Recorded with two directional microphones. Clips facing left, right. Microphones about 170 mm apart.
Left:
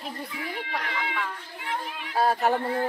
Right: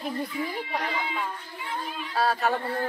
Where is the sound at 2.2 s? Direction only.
15° left (ahead or behind).